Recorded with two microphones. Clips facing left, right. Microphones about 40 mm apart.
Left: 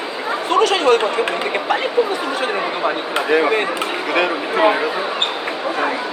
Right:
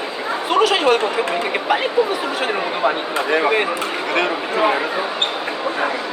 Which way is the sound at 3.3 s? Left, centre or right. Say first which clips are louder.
Left 2 dB; centre.